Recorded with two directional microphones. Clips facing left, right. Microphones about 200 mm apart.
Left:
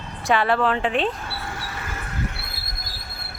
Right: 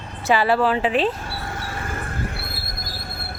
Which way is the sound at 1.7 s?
50° right (ahead or behind).